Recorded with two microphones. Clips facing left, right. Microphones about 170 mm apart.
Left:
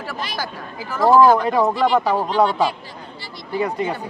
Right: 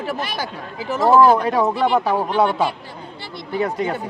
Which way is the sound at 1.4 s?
Centre (ahead or behind).